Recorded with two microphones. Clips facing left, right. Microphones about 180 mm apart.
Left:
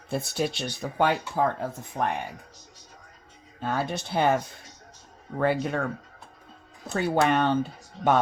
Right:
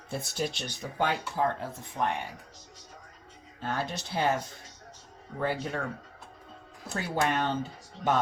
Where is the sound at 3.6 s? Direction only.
55° left (ahead or behind).